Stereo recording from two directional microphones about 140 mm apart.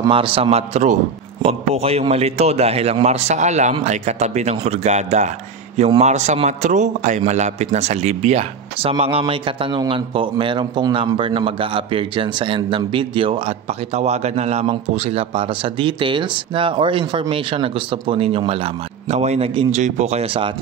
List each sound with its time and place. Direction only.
0.1 s a man's voice: 40° right (ahead or behind)